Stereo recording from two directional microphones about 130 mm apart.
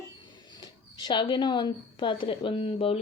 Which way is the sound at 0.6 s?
35° left (ahead or behind).